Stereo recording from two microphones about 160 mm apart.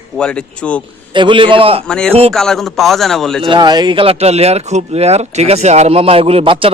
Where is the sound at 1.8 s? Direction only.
5° left (ahead or behind).